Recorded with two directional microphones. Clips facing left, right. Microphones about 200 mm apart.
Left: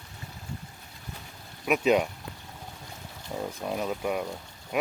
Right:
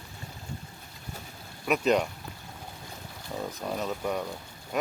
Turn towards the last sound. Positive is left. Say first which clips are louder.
# left 1 dB
turn(degrees=10)  # may be behind; listen again after turning